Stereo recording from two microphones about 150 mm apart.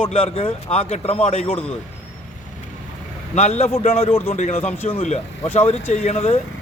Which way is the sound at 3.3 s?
45° left (ahead or behind).